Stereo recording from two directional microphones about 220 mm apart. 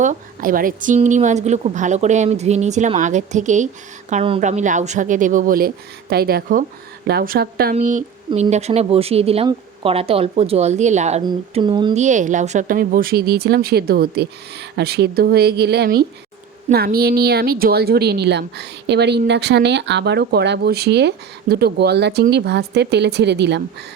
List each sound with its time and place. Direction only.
0.0 s a woman's voice: 35° right (ahead or behind)
11.2 s speech: 20° right (ahead or behind)
11.9 s a woman's voice: 35° right (ahead or behind); by 23.6 s 50° right (ahead or behind)